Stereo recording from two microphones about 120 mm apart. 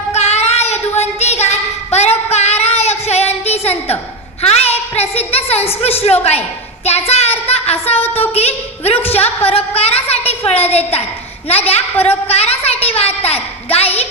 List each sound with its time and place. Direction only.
0.1 s child singing: 65° left (ahead or behind)
4.4 s a sound: 60° left (ahead or behind)
5.5 s a woman's voice: 55° left (ahead or behind)